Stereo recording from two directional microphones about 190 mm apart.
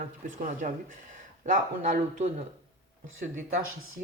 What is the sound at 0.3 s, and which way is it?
Speech, 45° right (ahead or behind).